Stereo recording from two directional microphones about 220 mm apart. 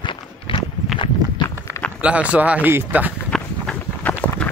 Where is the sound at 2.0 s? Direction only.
5° right (ahead or behind).